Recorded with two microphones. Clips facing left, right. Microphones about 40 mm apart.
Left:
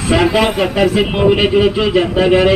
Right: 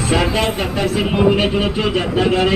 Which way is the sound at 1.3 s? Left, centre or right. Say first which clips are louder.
Left 5 dB; left.